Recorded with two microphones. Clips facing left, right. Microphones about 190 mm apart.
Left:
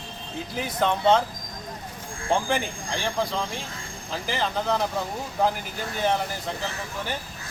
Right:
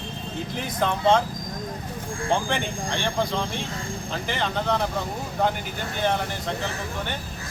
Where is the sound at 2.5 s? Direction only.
5° left (ahead or behind).